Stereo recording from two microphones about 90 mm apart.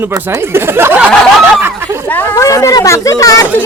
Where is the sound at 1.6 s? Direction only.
30° right (ahead or behind).